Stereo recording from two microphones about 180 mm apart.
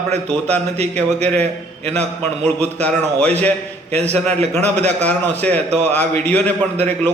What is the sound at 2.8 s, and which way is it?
Speech, 10° left (ahead or behind).